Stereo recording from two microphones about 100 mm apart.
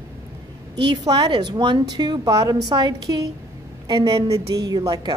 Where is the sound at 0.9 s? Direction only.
40° right (ahead or behind).